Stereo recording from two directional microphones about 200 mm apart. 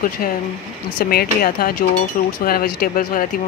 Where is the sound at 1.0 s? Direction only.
50° left (ahead or behind).